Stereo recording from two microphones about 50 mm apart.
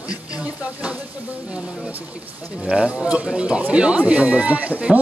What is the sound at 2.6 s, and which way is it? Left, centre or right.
A man's voice, right.